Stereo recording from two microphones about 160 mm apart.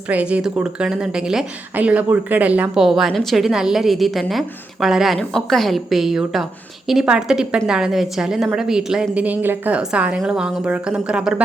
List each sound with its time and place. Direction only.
0.1 s a woman's voice: 10° right (ahead or behind)